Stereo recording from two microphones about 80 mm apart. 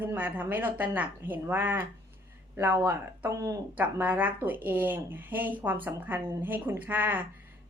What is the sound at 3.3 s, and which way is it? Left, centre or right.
Speech, right.